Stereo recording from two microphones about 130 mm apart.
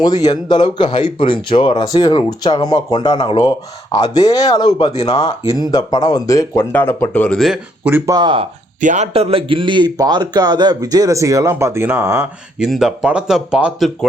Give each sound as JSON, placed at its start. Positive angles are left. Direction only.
{"t": 0.0, "sound": "speech", "side_deg": 30}
{"t": 6.7, "sound": "speech", "side_deg": 15}
{"t": 7.9, "sound": "speech", "side_deg": -15}
{"t": 8.1, "sound": "speech", "side_deg": -40}
{"t": 8.8, "sound": "speech", "side_deg": -75}
{"t": 9.1, "sound": "a man's voice", "side_deg": -45}
{"t": 12.5, "sound": "speech", "side_deg": -5}